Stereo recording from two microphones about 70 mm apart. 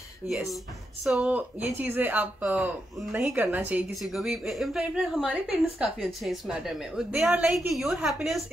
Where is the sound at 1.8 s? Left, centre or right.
Right.